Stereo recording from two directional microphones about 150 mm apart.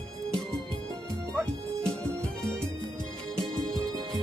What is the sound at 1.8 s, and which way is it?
Music, 5° left (ahead or behind).